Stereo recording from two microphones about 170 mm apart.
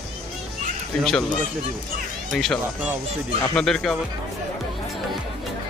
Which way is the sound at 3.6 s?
5° left (ahead or behind).